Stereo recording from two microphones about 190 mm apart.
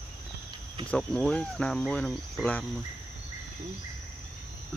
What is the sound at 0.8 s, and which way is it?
Speech, 5° left (ahead or behind).